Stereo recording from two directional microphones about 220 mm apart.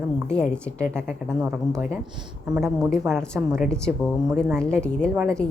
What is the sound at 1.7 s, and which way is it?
Speech, 5° left (ahead or behind).